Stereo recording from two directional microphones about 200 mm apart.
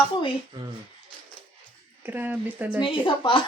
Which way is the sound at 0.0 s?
25° left (ahead or behind).